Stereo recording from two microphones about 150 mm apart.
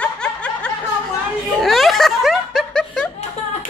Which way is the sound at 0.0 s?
5° left (ahead or behind).